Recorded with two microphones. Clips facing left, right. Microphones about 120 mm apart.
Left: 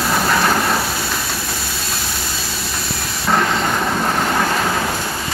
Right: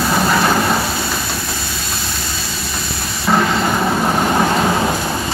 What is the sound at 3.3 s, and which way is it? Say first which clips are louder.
Vehicle: right 2 dB; 5° right (ahead or behind).